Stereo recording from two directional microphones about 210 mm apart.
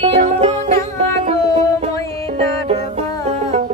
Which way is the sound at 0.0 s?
30° right (ahead or behind).